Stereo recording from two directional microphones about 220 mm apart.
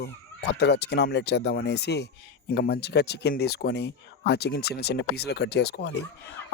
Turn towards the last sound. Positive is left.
turn(degrees=50)  # may be behind; listen again after turning